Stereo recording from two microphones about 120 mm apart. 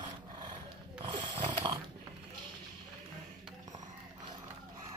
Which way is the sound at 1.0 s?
40° right (ahead or behind).